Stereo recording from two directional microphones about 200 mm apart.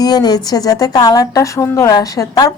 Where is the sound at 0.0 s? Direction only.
20° left (ahead or behind).